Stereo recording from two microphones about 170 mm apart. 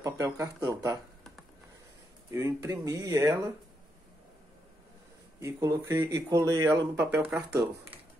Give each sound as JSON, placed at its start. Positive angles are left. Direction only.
{"t": 0.0, "sound": "speech", "side_deg": -20}
{"t": 2.3, "sound": "speech", "side_deg": -15}
{"t": 5.4, "sound": "speech", "side_deg": -15}